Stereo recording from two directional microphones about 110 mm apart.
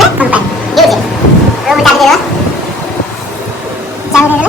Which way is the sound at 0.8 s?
Centre (ahead or behind).